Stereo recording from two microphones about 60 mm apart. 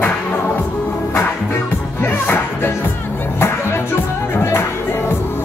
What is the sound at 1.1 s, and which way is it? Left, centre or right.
Music, left.